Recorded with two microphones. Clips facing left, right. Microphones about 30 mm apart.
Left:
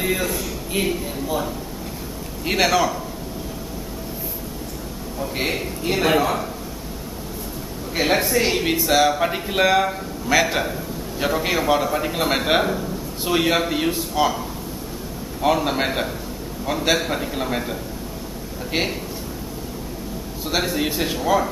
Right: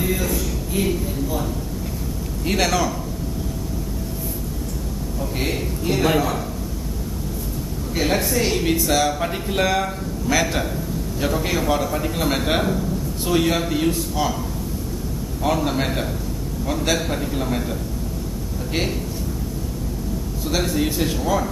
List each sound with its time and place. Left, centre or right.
0.0 s a man's voice: centre
5.2 s a man's voice: centre
7.9 s a man's voice: centre
15.4 s a man's voice: centre
18.7 s a man's voice: centre
20.4 s speech: centre